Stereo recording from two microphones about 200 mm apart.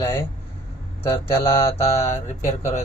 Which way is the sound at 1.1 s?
25° left (ahead or behind).